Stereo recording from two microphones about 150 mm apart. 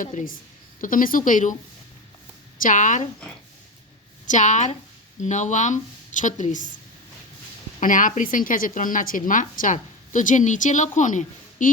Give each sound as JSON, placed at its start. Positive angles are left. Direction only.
{"t": 0.0, "sound": "a woman's voice", "side_deg": 60}
{"t": 2.6, "sound": "a woman's voice", "side_deg": 60}
{"t": 4.3, "sound": "a woman's voice", "side_deg": 55}
{"t": 7.8, "sound": "a woman's voice", "side_deg": 60}